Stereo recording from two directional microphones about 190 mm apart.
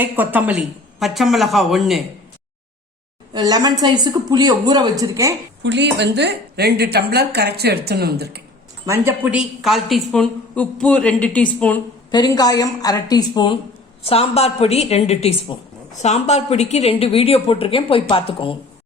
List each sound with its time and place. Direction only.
0.0 s a woman's voice: 10° right (ahead or behind)
3.3 s a woman's voice: 20° right (ahead or behind)
5.6 s a woman's voice: 65° right (ahead or behind)
8.9 s a woman's voice: 10° right (ahead or behind); by 11.8 s 5° left (ahead or behind)
12.1 s a woman's voice: 20° left (ahead or behind)